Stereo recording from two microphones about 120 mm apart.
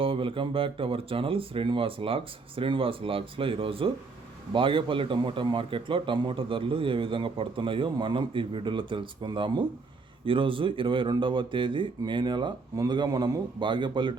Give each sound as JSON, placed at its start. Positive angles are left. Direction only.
{"t": 0.0, "sound": "a man's voice", "side_deg": -45}